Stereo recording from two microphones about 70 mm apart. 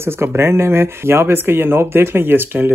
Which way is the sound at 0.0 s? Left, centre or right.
Right.